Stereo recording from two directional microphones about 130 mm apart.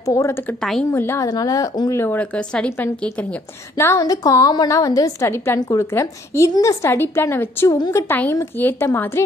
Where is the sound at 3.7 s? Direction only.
20° left (ahead or behind).